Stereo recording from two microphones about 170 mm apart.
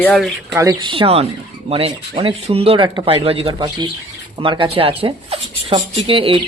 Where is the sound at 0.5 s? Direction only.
20° right (ahead or behind); by 3.5 s 35° right (ahead or behind).